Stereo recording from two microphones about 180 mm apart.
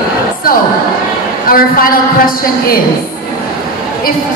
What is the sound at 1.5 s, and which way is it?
A woman's voice, 55° left (ahead or behind).